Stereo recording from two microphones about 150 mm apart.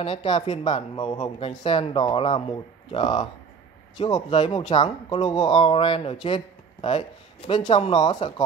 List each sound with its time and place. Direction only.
0.0 s speech: 40° left (ahead or behind)
0.9 s a man's voice: 25° left (ahead or behind)
1.6 s speech: 40° left (ahead or behind)